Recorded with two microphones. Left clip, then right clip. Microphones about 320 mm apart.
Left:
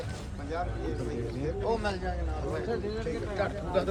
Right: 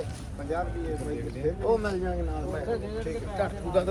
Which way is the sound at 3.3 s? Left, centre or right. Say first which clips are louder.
Right 4 dB; centre.